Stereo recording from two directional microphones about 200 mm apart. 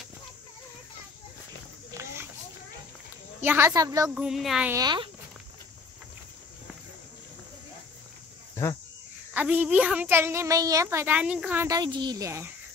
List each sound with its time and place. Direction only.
3.3 s a woman's voice: 10° right (ahead or behind)
4.1 s speech: 5° right (ahead or behind)
4.7 s speech: 20° right (ahead or behind)
9.3 s a woman's voice: 10° right (ahead or behind)